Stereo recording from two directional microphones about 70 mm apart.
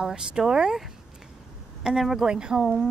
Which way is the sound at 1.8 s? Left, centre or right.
Centre.